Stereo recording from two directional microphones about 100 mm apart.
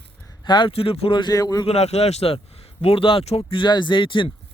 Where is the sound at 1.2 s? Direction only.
40° left (ahead or behind).